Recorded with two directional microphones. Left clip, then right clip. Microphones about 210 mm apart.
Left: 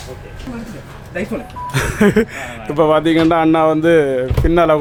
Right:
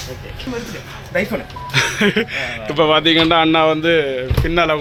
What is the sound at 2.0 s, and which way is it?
A man's voice, 15° left (ahead or behind).